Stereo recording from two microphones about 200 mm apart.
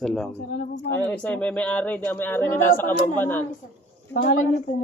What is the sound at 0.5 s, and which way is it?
Speech, 40° left (ahead or behind).